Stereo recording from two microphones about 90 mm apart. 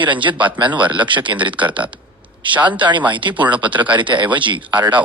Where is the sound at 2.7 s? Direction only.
60° right (ahead or behind).